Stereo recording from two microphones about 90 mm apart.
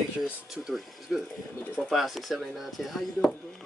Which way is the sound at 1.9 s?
Centre (ahead or behind).